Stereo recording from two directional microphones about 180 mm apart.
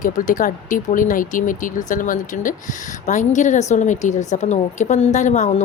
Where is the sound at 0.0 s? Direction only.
45° left (ahead or behind).